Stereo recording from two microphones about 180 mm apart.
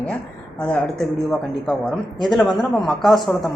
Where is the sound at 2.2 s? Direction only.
Centre (ahead or behind).